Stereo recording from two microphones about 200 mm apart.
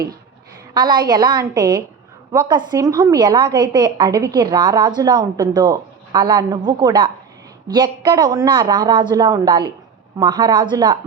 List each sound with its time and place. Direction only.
0.7 s a woman's voice: 20° right (ahead or behind)